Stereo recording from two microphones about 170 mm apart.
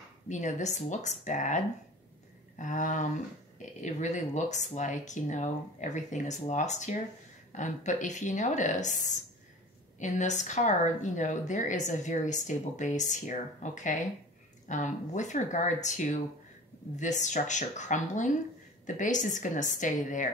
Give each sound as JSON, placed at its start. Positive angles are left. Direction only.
{"t": 0.3, "sound": "speech", "side_deg": 45}
{"t": 2.6, "sound": "speech", "side_deg": 50}